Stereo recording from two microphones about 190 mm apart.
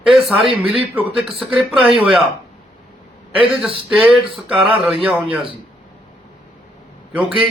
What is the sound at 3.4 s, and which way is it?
Speech, 30° right (ahead or behind).